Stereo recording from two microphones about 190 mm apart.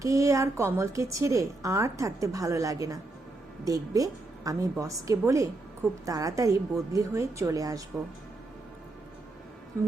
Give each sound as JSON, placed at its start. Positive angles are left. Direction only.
{"t": 0.0, "sound": "a woman's voice", "side_deg": -15}